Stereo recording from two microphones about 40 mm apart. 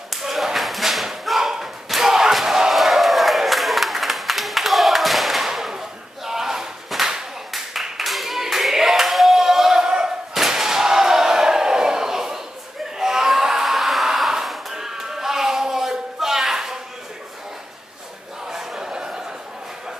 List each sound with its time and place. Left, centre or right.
0.1 s tap: centre
1.5 s battle cry: centre
2.7 s crowd: centre
5.5 s whip: centre
8.0 s clapping: centre
10.3 s a sound: centre
18.5 s a sound: centre